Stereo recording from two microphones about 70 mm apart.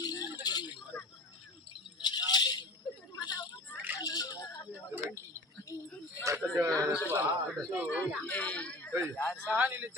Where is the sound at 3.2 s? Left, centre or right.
Left.